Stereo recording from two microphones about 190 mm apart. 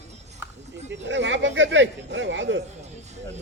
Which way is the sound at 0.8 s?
70° right (ahead or behind).